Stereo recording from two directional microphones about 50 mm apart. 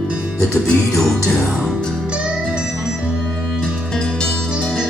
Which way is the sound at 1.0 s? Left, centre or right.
Centre.